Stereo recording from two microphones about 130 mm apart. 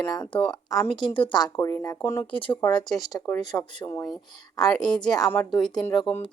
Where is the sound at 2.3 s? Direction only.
40° left (ahead or behind).